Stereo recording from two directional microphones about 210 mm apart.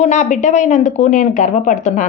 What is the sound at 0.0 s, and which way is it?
A woman's voice, 35° left (ahead or behind).